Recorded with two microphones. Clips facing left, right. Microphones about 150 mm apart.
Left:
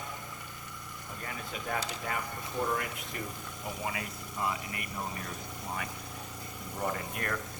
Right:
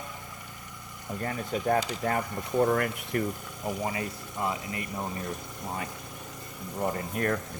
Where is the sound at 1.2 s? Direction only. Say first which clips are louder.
Right 10 dB; 45° right (ahead or behind).